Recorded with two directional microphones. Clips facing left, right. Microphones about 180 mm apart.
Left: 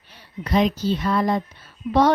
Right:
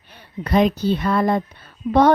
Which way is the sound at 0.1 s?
55° right (ahead or behind).